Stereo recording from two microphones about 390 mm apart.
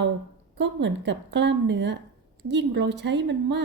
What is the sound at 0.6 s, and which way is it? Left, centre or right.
Speech, right.